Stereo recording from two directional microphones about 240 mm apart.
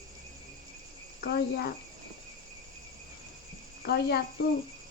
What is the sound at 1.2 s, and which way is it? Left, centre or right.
Cricket, left.